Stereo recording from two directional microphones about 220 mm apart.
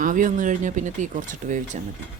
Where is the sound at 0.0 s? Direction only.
35° right (ahead or behind).